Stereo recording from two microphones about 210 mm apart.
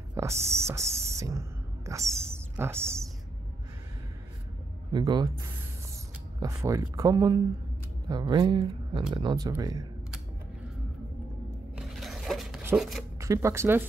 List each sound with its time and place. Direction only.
0.1 s speech: 15° right (ahead or behind)
2.0 s speech: 5° left (ahead or behind)
2.5 s speech: 10° right (ahead or behind)
4.9 s speech: 20° right (ahead or behind)
6.4 s speech: 15° right (ahead or behind)
11.7 s a sound: centre (ahead or behind)
13.2 s speech: 15° right (ahead or behind)